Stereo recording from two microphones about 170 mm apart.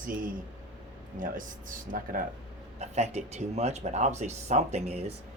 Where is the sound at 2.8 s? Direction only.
40° right (ahead or behind).